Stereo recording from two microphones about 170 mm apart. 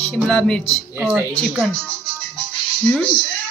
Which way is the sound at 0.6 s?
35° left (ahead or behind).